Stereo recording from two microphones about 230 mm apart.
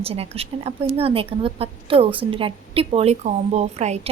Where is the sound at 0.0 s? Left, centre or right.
Right.